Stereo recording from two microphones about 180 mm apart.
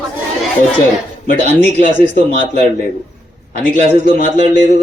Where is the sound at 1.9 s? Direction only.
50° left (ahead or behind).